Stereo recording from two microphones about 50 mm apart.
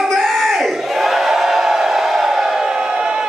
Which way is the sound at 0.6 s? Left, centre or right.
Centre.